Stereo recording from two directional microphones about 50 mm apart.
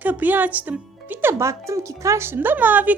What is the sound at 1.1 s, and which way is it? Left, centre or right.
Speech, right.